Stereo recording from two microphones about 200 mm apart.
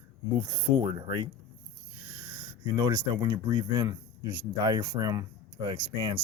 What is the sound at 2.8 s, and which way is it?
Speech, 20° right (ahead or behind).